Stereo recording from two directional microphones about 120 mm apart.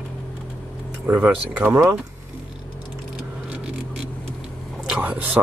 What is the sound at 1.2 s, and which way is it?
Speech, 20° right (ahead or behind).